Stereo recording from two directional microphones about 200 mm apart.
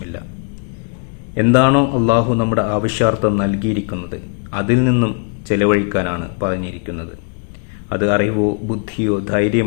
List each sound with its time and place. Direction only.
1.4 s a man's voice: 20° right (ahead or behind)